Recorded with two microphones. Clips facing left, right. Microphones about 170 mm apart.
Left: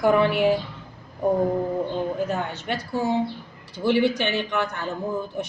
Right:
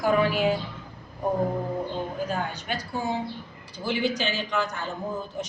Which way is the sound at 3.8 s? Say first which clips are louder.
Left 6 dB; 65° left (ahead or behind).